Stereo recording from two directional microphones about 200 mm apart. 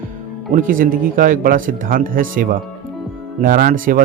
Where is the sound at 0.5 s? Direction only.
40° right (ahead or behind).